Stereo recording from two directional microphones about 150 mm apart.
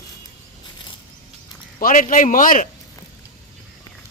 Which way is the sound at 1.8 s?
65° left (ahead or behind).